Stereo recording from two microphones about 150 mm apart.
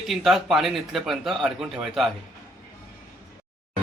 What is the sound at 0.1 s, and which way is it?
A man's voice, centre (ahead or behind).